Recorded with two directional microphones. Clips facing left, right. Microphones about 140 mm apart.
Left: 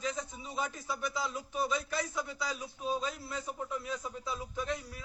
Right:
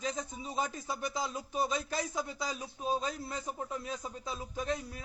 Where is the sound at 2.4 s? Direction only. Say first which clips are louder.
Even; 35° right (ahead or behind).